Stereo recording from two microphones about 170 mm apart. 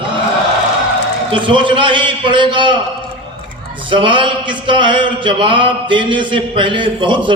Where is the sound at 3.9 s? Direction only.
30° right (ahead or behind).